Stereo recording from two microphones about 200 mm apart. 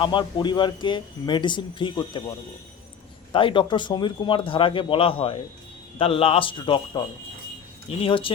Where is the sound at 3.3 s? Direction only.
25° left (ahead or behind).